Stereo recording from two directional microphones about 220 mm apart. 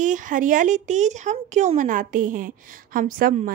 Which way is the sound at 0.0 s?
35° right (ahead or behind).